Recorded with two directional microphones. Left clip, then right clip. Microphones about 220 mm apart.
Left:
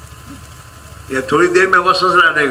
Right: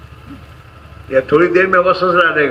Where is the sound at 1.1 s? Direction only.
55° left (ahead or behind).